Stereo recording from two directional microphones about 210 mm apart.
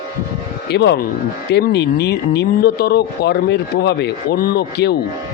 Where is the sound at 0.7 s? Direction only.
55° left (ahead or behind).